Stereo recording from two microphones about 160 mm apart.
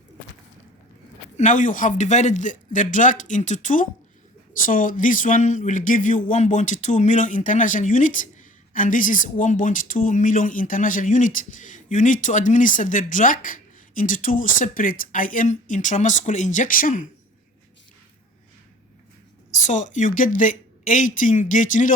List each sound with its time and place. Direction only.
1.4 s speech: 50° left (ahead or behind)
19.5 s speech: 50° left (ahead or behind)